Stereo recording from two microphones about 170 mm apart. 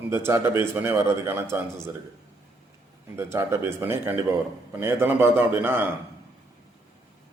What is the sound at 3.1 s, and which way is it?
A man's voice, 15° right (ahead or behind).